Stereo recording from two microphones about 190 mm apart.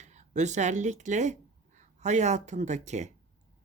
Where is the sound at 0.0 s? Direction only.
40° right (ahead or behind).